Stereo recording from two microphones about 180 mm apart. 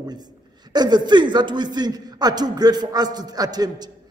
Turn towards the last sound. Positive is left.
turn(degrees=-20)  # may be behind; listen again after turning